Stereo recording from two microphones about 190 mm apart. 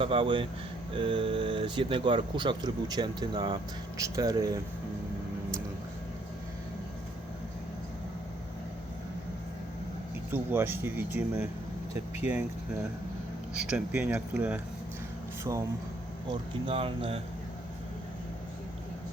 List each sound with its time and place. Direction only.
0.0 s speech: 25° right (ahead or behind)
10.3 s speech: 10° right (ahead or behind)
13.5 s speech: 5° right (ahead or behind)
16.3 s speech: 30° right (ahead or behind)